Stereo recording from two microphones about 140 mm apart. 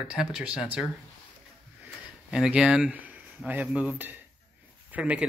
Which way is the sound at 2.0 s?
5° right (ahead or behind).